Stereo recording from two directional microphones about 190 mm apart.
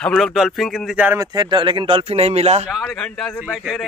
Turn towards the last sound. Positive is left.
turn(degrees=0)  # may be behind; listen again after turning